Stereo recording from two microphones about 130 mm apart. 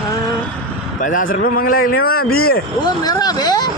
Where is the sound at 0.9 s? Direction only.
90° left.